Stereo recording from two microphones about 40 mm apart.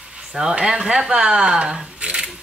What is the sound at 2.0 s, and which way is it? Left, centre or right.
Camera, right.